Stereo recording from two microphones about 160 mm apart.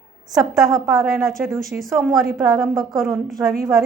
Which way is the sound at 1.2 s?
Centre (ahead or behind).